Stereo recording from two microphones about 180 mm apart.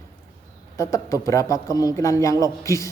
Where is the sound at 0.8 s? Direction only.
15° left (ahead or behind).